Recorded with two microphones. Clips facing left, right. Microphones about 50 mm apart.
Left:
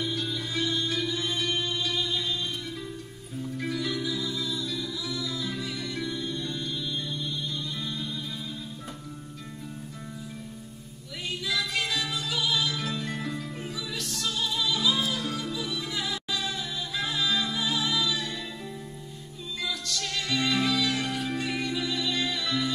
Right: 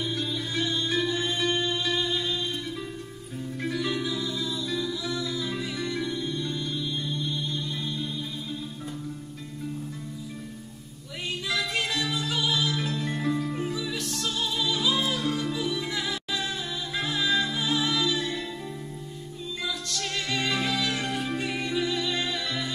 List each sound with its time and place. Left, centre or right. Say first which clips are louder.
0.6 s music: right 2 dB; right
3.6 s music: right 2 dB; right
11.4 s music: right 1 dB; right
19.9 s music: left 1 dB; right